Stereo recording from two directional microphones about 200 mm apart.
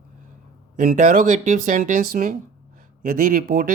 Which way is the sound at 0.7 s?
40° right (ahead or behind).